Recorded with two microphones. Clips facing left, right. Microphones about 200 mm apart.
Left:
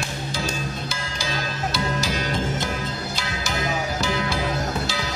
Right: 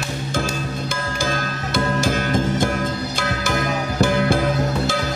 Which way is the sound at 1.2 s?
50° right (ahead or behind).